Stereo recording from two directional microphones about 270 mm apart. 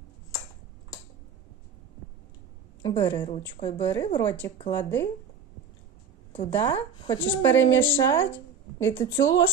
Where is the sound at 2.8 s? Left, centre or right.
Centre.